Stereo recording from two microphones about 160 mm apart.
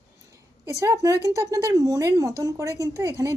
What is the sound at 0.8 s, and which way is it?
Speech, 20° right (ahead or behind).